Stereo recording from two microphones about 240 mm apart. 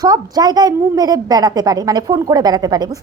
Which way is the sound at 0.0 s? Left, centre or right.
Centre.